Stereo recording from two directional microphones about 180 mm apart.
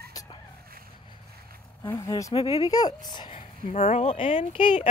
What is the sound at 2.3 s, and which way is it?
Speech, 30° left (ahead or behind).